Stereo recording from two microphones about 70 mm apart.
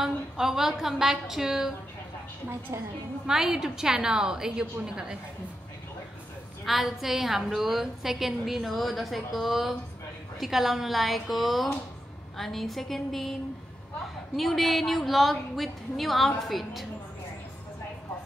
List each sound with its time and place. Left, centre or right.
0.0 s a woman's voice: centre
2.7 s a woman's voice: right
3.3 s a woman's voice: centre
6.6 s a woman's voice: centre